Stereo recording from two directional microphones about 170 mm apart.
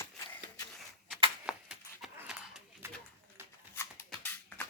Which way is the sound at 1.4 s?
5° right (ahead or behind).